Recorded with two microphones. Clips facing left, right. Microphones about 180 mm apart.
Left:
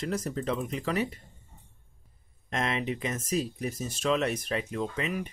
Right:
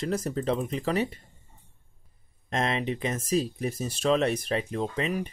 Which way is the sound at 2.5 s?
30° right (ahead or behind).